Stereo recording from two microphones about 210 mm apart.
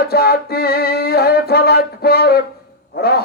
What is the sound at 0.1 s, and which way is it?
Music, 45° left (ahead or behind).